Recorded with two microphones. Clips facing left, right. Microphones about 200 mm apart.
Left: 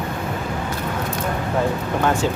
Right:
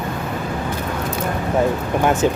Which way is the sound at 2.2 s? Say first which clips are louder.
Right 4 dB; 15° right (ahead or behind).